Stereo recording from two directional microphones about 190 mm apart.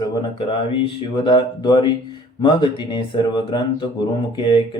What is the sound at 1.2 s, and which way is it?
Speech, 25° left (ahead or behind).